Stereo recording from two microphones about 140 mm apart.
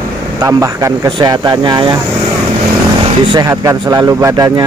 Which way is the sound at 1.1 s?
30° right (ahead or behind).